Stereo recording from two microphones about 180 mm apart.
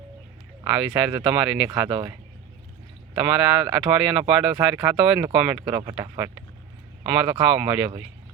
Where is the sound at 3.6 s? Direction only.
5° right (ahead or behind).